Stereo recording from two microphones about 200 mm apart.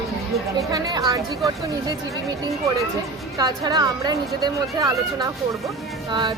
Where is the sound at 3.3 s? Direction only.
20° right (ahead or behind).